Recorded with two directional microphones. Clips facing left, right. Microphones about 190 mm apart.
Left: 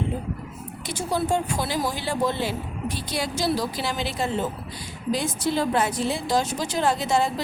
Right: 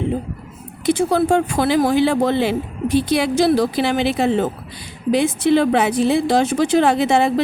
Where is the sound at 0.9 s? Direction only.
60° right (ahead or behind).